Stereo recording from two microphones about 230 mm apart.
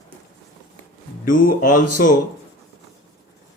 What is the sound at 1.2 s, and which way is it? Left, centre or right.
Speech, left.